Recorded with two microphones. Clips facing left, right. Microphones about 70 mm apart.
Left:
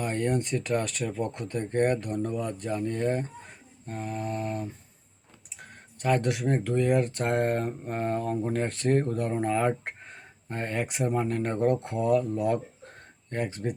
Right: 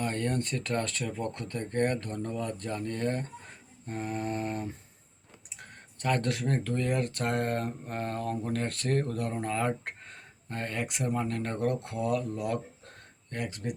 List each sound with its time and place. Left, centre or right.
0.0 s speech: centre
3.8 s mantra: centre
5.5 s speech: centre; by 13.7 s left